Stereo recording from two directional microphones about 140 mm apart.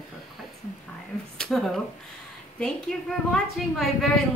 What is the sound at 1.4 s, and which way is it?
Speech, centre (ahead or behind).